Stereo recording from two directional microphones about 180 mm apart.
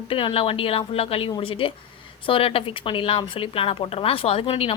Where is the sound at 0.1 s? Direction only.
30° left (ahead or behind).